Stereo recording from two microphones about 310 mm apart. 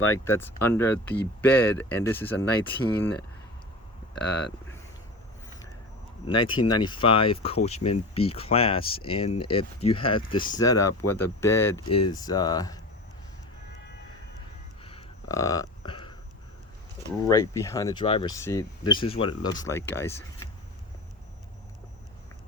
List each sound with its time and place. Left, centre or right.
0.3 s speech: centre
6.2 s speech: centre
14.8 s a sound: centre
17.2 s speech: centre